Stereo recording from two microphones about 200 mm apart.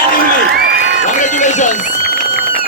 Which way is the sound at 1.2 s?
40° left (ahead or behind).